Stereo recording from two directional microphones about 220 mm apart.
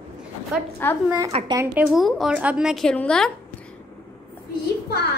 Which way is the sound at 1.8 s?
Centre (ahead or behind).